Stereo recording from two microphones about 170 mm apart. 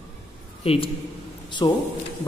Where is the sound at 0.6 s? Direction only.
35° left (ahead or behind).